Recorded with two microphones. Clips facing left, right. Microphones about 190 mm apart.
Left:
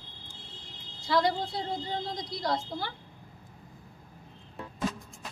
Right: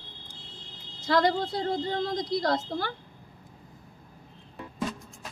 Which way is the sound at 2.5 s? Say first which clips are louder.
Right 3 dB; 45° right (ahead or behind).